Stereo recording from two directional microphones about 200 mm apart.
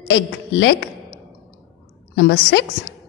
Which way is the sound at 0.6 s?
55° left (ahead or behind).